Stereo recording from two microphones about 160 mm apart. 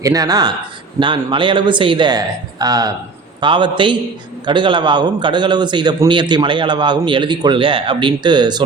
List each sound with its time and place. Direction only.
0.0 s a man's voice: 20° right (ahead or behind)